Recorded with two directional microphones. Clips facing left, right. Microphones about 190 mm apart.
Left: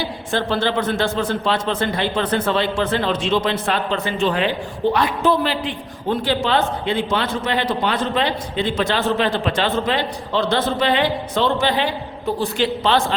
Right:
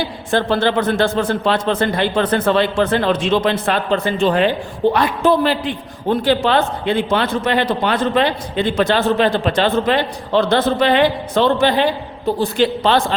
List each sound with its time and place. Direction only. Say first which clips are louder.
0.0 s a man's voice: right 4 dB; 55° right (ahead or behind)
3.9 s a man's voice: right 7 dB; 40° right (ahead or behind)